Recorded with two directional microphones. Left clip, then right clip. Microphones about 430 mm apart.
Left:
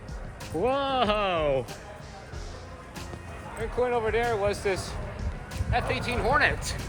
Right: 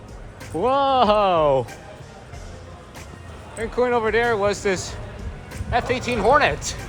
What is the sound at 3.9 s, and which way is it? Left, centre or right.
Speech, centre.